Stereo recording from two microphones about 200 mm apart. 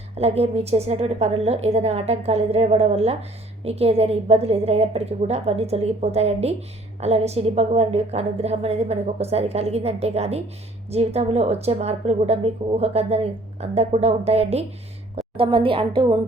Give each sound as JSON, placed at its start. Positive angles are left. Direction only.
{"t": 0.2, "sound": "a woman's voice", "side_deg": -30}